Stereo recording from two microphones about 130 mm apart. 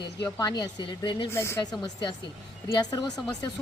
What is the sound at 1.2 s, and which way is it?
Speech, 20° left (ahead or behind).